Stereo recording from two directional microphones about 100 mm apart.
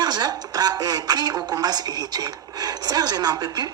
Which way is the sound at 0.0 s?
45° right (ahead or behind).